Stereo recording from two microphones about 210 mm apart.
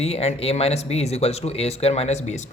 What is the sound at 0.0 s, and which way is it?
Speech, 30° left (ahead or behind).